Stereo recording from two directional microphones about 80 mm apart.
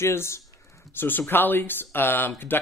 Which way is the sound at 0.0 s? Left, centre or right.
Left.